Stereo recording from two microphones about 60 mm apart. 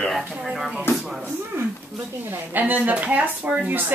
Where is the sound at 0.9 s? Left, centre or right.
Left.